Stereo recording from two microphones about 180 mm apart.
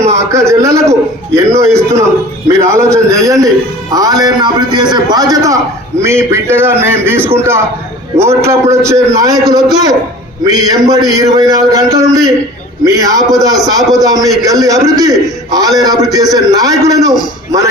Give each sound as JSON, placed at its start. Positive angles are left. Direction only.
{"t": 0.3, "sound": "a man's voice", "side_deg": -15}